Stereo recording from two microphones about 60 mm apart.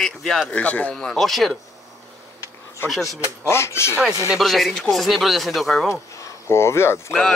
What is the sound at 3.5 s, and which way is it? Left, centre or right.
Speech, left.